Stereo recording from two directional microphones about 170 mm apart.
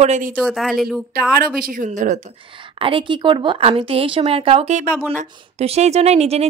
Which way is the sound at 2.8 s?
30° right (ahead or behind).